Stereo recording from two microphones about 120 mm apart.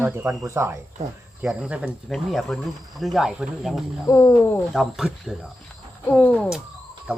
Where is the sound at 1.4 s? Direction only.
5° right (ahead or behind).